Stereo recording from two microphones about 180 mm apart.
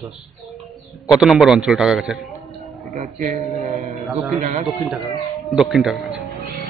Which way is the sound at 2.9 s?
45° right (ahead or behind).